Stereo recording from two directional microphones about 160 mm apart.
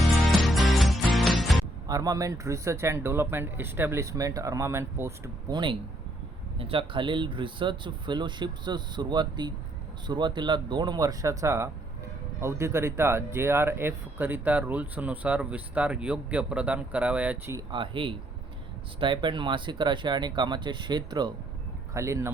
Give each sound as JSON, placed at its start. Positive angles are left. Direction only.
{"t": 0.0, "sound": "music", "side_deg": 0}
{"t": 1.9, "sound": "speech", "side_deg": -20}
{"t": 6.6, "sound": "speech", "side_deg": -35}
{"t": 17.7, "sound": "speech", "side_deg": -30}